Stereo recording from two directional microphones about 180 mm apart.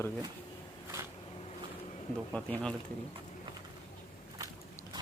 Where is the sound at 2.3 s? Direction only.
5° left (ahead or behind).